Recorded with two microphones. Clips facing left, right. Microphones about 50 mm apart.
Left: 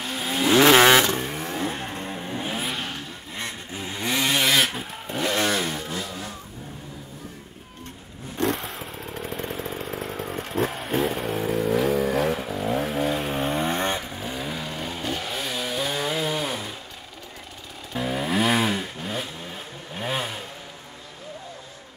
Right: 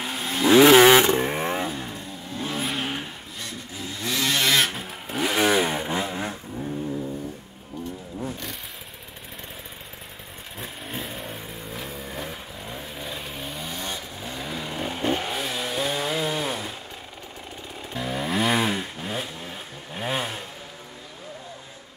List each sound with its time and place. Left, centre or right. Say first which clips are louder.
0.2 s vehicle: right 3 dB; centre
1.0 s vehicle: right 4 dB; right
1.7 s vehicle: left 2 dB; left
2.6 s vehicle: right 1 dB; centre
3.3 s chainsaw: left 4 dB; left; by 6.3 s right
9.6 s motorcycle: left 10 dB; left
13.6 s vehicle: left 8 dB; left
14.2 s vehicle: left 2 dB; centre
14.6 s vehicle: right 1 dB; centre
14.9 s vehicle: right 6 dB; right
15.3 s chainsaw: even; centre
17.9 s chainsaw: left 2 dB; centre